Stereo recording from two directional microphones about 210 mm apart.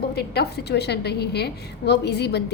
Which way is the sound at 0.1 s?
50° left (ahead or behind).